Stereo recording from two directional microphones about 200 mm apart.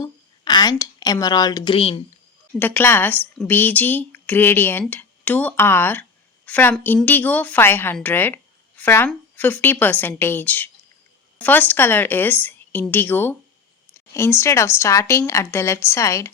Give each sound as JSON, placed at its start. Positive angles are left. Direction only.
{"t": 0.0, "sound": "a woman's voice", "side_deg": 20}
{"t": 2.6, "sound": "a woman's voice", "side_deg": 10}